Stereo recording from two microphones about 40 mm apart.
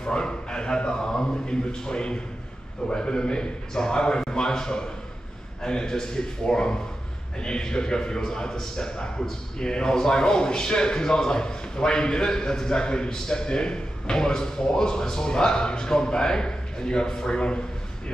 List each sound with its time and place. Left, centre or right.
0.0 s a man's voice: centre